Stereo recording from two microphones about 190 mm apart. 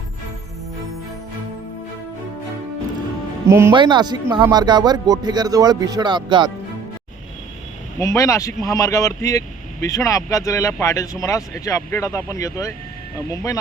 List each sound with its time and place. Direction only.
3.7 s speech: 25° right (ahead or behind)
7.9 s speech: 15° left (ahead or behind)